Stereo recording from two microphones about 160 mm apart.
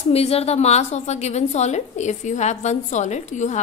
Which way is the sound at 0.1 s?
40° left (ahead or behind).